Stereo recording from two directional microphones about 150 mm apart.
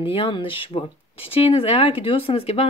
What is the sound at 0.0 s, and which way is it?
Speech, 35° left (ahead or behind).